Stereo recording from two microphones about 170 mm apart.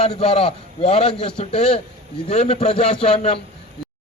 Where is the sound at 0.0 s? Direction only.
35° left (ahead or behind).